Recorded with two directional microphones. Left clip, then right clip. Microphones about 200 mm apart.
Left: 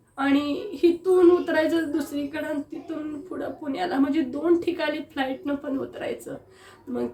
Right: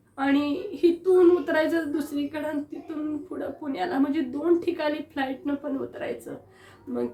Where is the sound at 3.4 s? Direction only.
5° left (ahead or behind).